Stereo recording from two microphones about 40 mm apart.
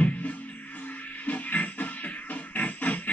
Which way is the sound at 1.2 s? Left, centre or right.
Left.